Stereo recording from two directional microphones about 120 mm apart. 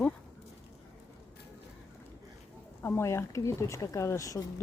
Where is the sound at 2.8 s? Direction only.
20° left (ahead or behind).